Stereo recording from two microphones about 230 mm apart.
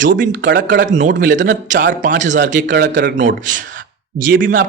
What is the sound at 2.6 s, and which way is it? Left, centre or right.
A man's voice, right.